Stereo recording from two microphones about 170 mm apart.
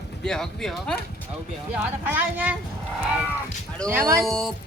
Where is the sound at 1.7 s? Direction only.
10° right (ahead or behind).